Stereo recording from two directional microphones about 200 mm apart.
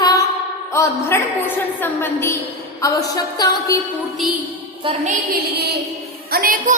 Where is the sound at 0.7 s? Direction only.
15° left (ahead or behind).